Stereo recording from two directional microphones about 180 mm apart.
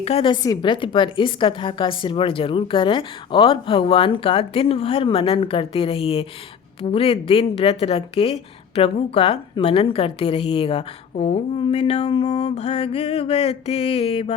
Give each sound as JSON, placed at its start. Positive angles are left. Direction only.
{"t": 0.0, "sound": "a woman's voice", "side_deg": 30}